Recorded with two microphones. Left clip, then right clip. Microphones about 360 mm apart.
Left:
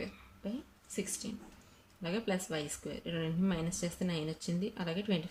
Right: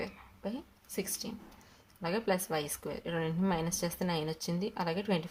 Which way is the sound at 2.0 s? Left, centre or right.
Centre.